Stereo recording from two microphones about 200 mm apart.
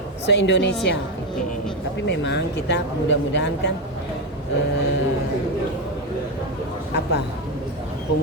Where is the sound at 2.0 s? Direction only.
60° left (ahead or behind).